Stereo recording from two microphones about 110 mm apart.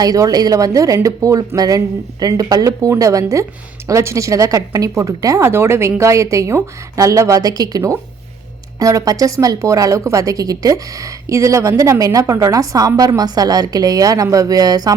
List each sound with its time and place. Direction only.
0.0 s speech: 35° right (ahead or behind)